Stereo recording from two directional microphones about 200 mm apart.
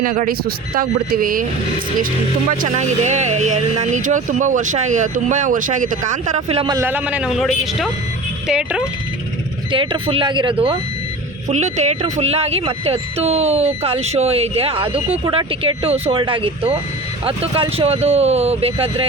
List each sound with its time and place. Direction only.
0.0 s speech: 45° right (ahead or behind)
2.5 s speech: 40° right (ahead or behind)
6.7 s a man's voice: 10° right (ahead or behind)
9.7 s speech: 25° right (ahead or behind)